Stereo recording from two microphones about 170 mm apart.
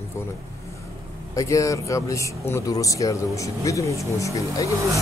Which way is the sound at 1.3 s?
20° left (ahead or behind).